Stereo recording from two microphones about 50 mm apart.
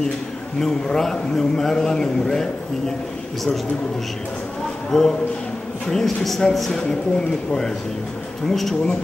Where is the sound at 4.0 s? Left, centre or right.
Centre.